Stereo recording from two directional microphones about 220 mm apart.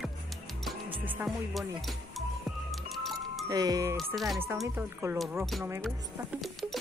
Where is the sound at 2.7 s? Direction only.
Centre (ahead or behind).